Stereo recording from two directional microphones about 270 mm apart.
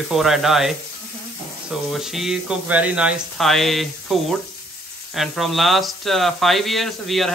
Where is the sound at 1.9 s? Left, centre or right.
Centre.